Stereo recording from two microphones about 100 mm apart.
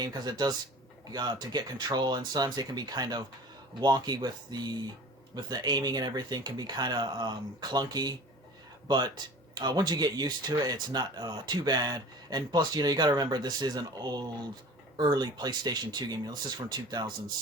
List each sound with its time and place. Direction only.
0.0 s speech: 40° right (ahead or behind)